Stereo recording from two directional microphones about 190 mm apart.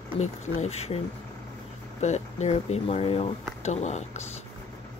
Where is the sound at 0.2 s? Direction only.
35° left (ahead or behind).